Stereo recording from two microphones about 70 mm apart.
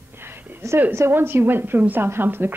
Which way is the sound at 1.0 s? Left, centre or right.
Right.